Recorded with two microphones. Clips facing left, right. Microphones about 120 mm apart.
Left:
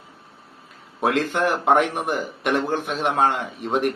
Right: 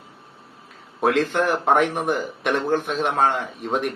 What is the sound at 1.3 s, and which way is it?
Speech, 10° left (ahead or behind).